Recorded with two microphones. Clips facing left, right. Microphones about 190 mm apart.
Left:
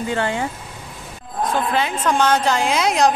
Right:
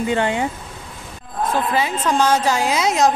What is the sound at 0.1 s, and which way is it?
Speech, 20° right (ahead or behind).